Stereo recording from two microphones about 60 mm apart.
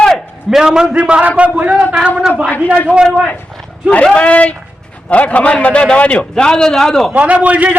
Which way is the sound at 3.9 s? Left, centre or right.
Centre.